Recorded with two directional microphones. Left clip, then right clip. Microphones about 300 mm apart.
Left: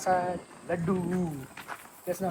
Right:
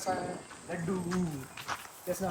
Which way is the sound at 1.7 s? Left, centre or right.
Centre.